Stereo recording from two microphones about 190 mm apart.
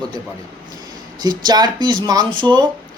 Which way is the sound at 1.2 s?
20° right (ahead or behind).